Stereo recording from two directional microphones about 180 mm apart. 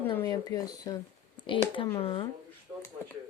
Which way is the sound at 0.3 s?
20° left (ahead or behind).